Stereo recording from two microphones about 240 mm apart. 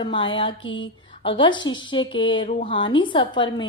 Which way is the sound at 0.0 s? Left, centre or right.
Left.